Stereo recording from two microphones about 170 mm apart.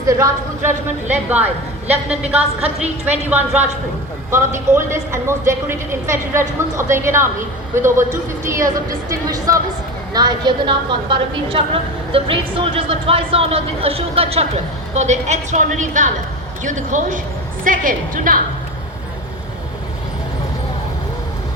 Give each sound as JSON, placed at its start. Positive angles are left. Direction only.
{"t": 0.0, "sound": "speech", "side_deg": -20}
{"t": 2.6, "sound": "a woman's voice", "side_deg": -5}